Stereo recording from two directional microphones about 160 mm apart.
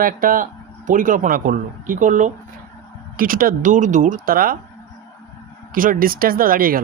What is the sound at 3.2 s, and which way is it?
Speech, 60° right (ahead or behind).